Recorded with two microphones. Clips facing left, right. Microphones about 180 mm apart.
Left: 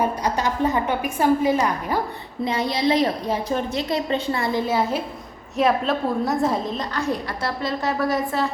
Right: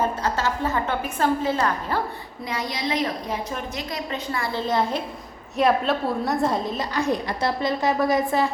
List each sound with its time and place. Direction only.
0.0 s a woman's voice: 15° left (ahead or behind)
2.4 s a woman's voice: 25° left (ahead or behind)
4.6 s a woman's voice: 5° left (ahead or behind)
6.9 s a woman's voice: 20° right (ahead or behind)